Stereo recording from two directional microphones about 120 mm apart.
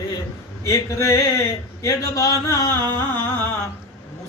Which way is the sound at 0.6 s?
25° left (ahead or behind).